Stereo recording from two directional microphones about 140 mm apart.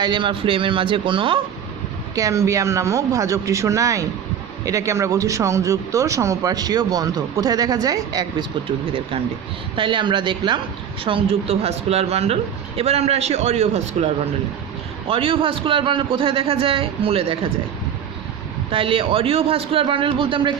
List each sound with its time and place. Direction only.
0.0 s a man's voice: 35° right (ahead or behind)
2.1 s speech: 25° right (ahead or behind)
9.7 s a man's voice: 35° right (ahead or behind); by 14.1 s 50° right (ahead or behind)
15.0 s a man's voice: 40° right (ahead or behind)
18.7 s a man's voice: 40° right (ahead or behind)